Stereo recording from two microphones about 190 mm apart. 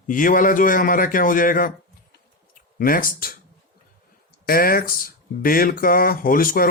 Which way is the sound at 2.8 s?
45° left (ahead or behind).